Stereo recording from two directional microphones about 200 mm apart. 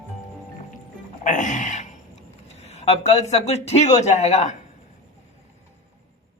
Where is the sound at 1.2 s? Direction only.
40° left (ahead or behind).